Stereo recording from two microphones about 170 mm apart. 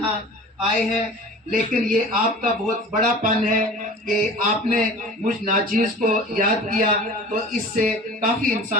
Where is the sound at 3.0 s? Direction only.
50° right (ahead or behind).